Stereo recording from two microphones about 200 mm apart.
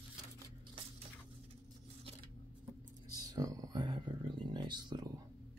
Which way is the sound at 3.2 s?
20° right (ahead or behind).